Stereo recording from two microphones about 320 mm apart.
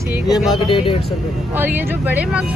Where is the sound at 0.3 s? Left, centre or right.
Centre.